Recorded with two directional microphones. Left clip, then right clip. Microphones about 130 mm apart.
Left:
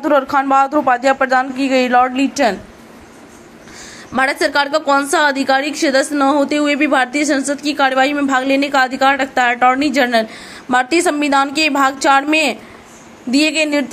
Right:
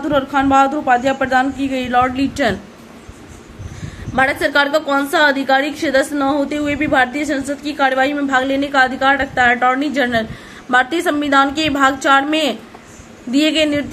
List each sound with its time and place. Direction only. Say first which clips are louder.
0.0 s speech: left 2 dB; 25° left (ahead or behind)
4.1 s a woman's voice: even; 35° left (ahead or behind)